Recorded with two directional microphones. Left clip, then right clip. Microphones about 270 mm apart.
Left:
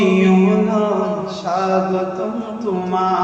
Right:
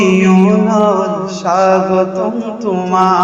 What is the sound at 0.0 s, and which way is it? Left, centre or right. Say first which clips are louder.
Music: right 4 dB; centre.